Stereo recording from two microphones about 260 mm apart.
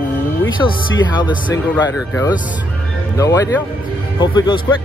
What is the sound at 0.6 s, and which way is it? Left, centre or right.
Speech, centre.